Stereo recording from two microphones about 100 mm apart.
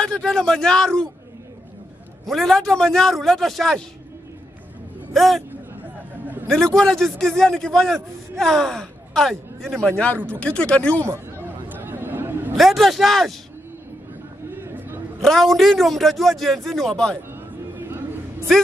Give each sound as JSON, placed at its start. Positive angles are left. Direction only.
{"t": 0.0, "sound": "a man's voice", "side_deg": 5}
{"t": 2.2, "sound": "a man's voice", "side_deg": 0}
{"t": 5.1, "sound": "a man's voice", "side_deg": 0}
{"t": 6.4, "sound": "a man's voice", "side_deg": 5}
{"t": 10.1, "sound": "speech", "side_deg": -20}
{"t": 10.4, "sound": "a man's voice", "side_deg": 10}
{"t": 11.4, "sound": "chatter", "side_deg": -20}
{"t": 12.5, "sound": "a man's voice", "side_deg": 0}
{"t": 14.5, "sound": "a sound", "side_deg": -20}
{"t": 15.2, "sound": "a man's voice", "side_deg": 0}
{"t": 17.3, "sound": "a sound", "side_deg": -20}